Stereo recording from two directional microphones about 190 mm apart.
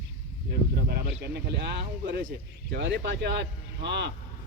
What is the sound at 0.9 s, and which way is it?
Speech, 55° right (ahead or behind).